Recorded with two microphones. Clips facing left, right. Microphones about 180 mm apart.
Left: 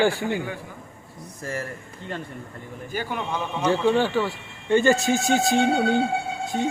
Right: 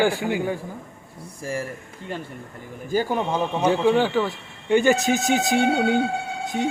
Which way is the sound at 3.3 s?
15° right (ahead or behind).